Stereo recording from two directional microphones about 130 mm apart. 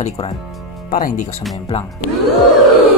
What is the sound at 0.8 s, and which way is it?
Speech, 90° left.